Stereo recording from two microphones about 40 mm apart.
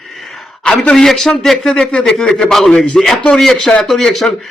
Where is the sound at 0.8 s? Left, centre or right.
Left.